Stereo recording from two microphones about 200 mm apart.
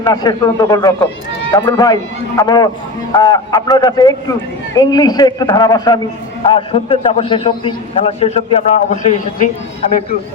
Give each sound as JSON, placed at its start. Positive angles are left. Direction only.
{"t": 0.0, "sound": "a man's voice", "side_deg": 20}